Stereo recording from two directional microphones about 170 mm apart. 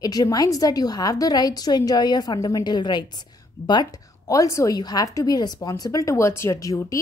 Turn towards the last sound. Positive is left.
turn(degrees=20)  # may be behind; listen again after turning